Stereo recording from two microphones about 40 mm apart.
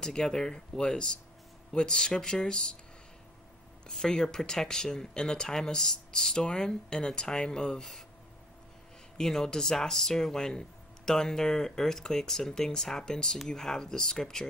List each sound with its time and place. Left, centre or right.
0.0 s speech: centre
3.8 s speech: centre
9.2 s speech: centre